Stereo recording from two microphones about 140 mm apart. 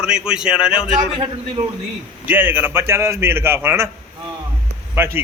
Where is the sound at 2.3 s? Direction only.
15° right (ahead or behind).